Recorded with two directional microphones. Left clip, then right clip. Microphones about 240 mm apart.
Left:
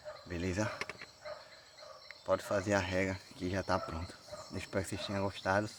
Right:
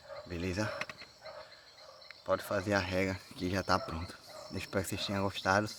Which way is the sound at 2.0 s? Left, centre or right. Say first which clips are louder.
Even; centre.